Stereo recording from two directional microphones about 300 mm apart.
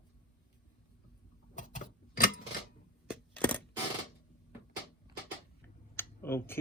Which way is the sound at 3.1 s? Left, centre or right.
Centre.